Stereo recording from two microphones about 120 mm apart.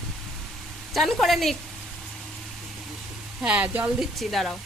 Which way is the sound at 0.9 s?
Centre (ahead or behind).